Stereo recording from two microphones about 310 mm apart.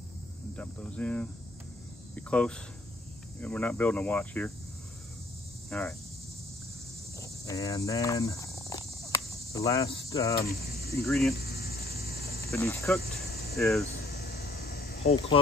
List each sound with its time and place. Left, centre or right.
0.6 s speech: centre
5.7 s speech: centre
7.2 s cricket: centre
10.3 s speech: left
11.1 s speech: centre
11.3 s mains hum: left
12.5 s speech: centre
13.0 s cricket: left
13.6 s speech: centre
13.9 s insect: left